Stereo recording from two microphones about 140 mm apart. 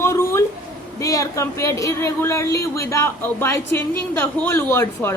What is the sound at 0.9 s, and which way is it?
Speech, 25° left (ahead or behind).